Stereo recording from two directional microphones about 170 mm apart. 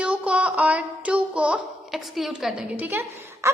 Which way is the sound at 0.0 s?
5° right (ahead or behind).